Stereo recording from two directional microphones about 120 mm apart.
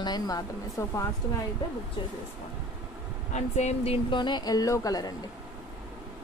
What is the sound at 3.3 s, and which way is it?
Speech, 70° left (ahead or behind).